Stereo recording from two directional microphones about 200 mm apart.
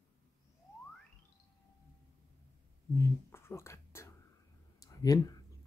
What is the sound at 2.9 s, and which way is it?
Speech, 15° left (ahead or behind).